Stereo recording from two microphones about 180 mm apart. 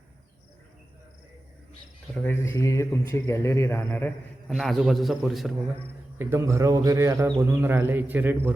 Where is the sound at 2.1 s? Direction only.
10° left (ahead or behind).